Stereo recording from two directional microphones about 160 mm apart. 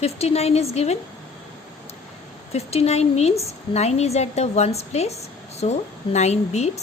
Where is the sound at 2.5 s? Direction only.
40° left (ahead or behind).